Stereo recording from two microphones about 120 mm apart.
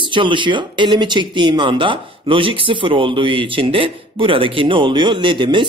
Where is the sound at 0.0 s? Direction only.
45° right (ahead or behind).